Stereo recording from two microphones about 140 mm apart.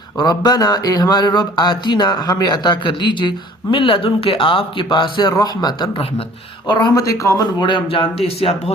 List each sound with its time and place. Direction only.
0.2 s speech: 25° left (ahead or behind); by 8.7 s 45° left (ahead or behind)